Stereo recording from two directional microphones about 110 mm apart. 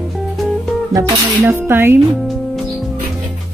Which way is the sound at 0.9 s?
25° right (ahead or behind).